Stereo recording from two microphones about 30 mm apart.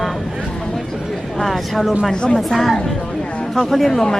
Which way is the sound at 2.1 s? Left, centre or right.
Left.